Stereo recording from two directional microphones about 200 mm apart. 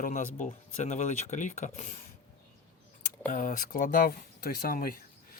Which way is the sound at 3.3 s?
40° left (ahead or behind).